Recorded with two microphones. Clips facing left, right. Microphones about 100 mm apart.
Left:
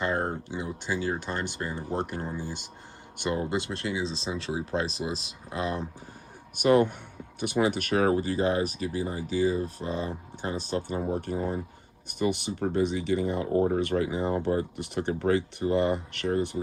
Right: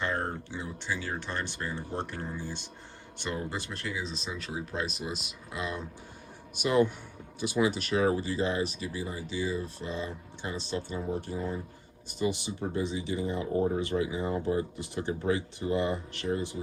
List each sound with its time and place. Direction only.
0.0 s speech: 20° left (ahead or behind); by 5.8 s 35° left (ahead or behind)
6.6 s speech: 55° left (ahead or behind)